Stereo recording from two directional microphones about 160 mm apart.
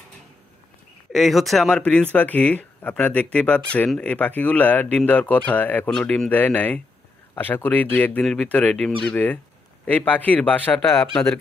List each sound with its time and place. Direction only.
1.1 s speech: centre (ahead or behind)